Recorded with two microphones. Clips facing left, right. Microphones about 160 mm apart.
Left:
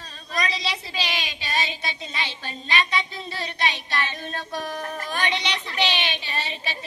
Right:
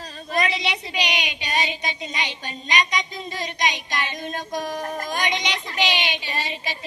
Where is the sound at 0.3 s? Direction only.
20° right (ahead or behind).